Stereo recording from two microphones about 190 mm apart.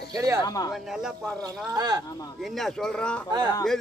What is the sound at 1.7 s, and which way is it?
Speech, 20° right (ahead or behind).